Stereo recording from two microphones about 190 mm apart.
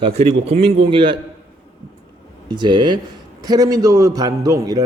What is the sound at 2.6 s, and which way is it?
A man's voice, 25° right (ahead or behind).